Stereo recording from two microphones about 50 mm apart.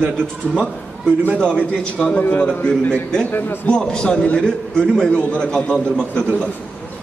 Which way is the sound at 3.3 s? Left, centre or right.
Left.